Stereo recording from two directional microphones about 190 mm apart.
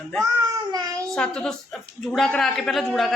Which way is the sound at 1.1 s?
5° left (ahead or behind).